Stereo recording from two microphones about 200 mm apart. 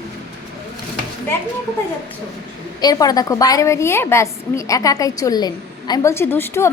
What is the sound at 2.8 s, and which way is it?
A woman's voice, 20° left (ahead or behind).